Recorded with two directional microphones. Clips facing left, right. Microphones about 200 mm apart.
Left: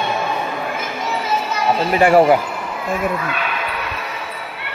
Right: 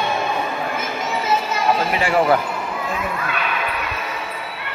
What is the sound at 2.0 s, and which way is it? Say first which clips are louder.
Speech: left 11 dB; 45° left (ahead or behind).